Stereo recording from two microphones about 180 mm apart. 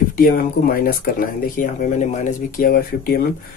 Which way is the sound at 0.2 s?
50° left (ahead or behind).